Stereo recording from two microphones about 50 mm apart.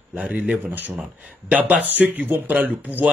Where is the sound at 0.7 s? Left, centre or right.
Right.